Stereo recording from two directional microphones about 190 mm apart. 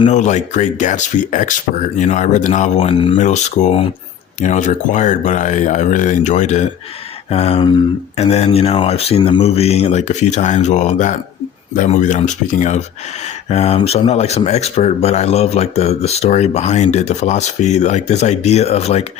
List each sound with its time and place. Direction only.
0.1 s speech: 40° left (ahead or behind)
3.2 s speech: 40° left (ahead or behind)